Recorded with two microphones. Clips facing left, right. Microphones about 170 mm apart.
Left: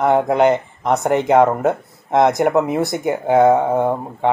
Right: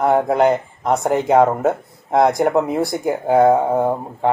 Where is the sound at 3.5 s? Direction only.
Centre (ahead or behind).